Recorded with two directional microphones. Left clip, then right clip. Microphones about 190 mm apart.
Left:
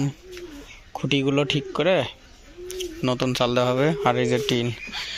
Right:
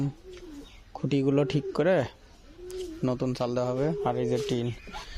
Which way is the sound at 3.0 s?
5° right (ahead or behind).